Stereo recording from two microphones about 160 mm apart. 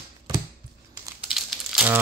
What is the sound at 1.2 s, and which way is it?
Crumpling, centre (ahead or behind).